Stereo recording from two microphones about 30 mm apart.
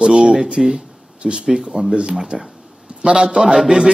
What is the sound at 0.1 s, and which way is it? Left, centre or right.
Speech, right.